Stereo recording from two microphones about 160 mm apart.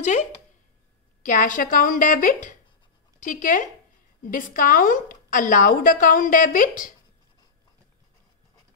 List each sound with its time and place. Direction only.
0.0 s a woman's voice: 45° left (ahead or behind)